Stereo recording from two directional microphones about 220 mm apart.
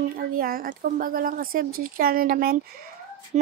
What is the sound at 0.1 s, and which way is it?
Speech, 40° right (ahead or behind).